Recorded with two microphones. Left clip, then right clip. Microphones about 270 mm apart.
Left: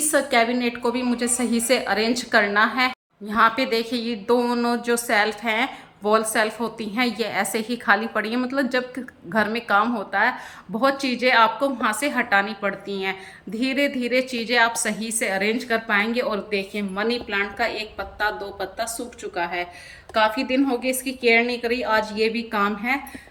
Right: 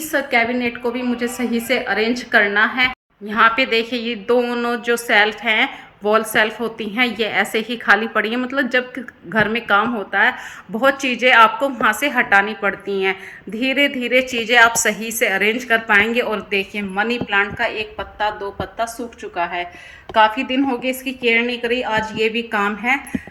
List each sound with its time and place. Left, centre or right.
0.1 s a woman's voice: centre